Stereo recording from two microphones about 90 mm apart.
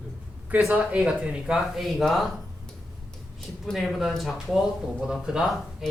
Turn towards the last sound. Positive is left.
turn(degrees=-5)  # may be behind; listen again after turning